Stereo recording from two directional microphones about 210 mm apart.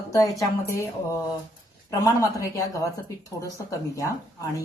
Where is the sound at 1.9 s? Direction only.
15° left (ahead or behind).